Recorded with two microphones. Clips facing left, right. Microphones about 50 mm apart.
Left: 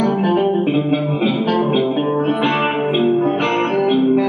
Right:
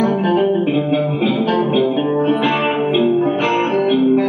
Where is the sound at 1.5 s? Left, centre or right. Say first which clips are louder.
Right 1 dB; centre.